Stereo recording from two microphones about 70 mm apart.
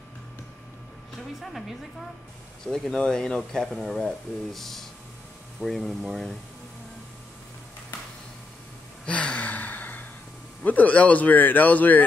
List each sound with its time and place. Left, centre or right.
1.4 s speech: centre
9.0 s gasp: centre
10.6 s a man's voice: left